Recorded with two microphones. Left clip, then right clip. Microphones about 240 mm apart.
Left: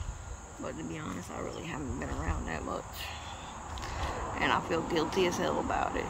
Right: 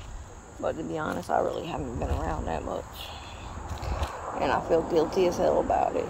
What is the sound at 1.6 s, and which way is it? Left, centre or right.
Insect, left.